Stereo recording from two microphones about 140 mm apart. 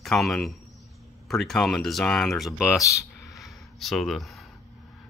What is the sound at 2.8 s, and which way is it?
Speech, 20° left (ahead or behind).